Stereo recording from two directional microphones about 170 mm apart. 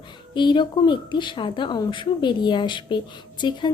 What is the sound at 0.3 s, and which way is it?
Speech, 25° left (ahead or behind).